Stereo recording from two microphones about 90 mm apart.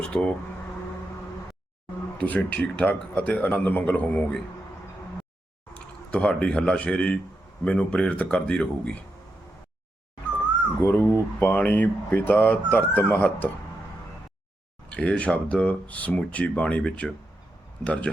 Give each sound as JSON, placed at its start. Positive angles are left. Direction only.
{"t": 0.0, "sound": "speech", "side_deg": 10}
{"t": 2.2, "sound": "speech", "side_deg": 15}
{"t": 5.7, "sound": "speech", "side_deg": 15}
{"t": 10.8, "sound": "speech", "side_deg": 25}
{"t": 14.8, "sound": "speech", "side_deg": 10}